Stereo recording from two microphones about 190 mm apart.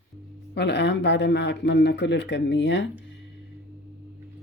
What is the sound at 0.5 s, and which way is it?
Speech, 65° left (ahead or behind).